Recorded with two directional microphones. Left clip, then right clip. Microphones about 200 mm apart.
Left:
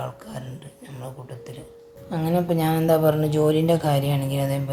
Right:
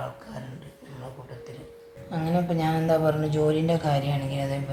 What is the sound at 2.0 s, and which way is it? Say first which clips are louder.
Speech: left 4 dB; 40° left (ahead or behind).